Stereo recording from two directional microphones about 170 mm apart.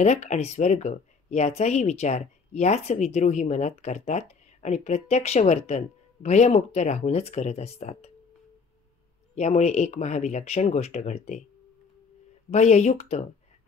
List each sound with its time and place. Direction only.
0.0 s speech: 40° left (ahead or behind)
9.3 s speech: 40° left (ahead or behind)
12.4 s speech: 40° left (ahead or behind)